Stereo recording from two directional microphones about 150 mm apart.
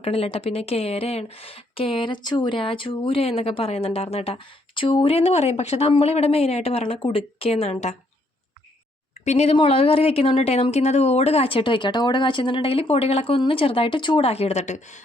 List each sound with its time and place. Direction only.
0.0 s speech: 40° left (ahead or behind)
9.2 s speech: 45° left (ahead or behind)